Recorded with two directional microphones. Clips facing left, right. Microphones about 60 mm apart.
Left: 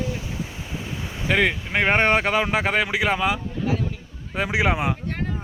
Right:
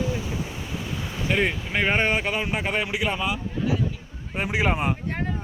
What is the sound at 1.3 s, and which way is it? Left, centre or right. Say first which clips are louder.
Speech: left 3 dB; left.